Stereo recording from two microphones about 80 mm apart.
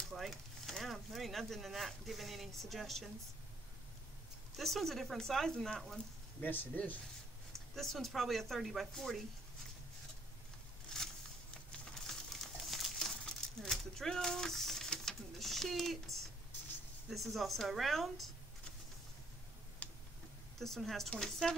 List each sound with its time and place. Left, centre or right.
0.1 s speech: centre
4.6 s speech: centre
6.4 s speech: left
7.5 s speech: centre
10.9 s a sound: centre
11.7 s crumpling: centre
13.2 s a sound: centre
17.1 s speech: centre
19.8 s tick-tock: centre
20.5 s speech: centre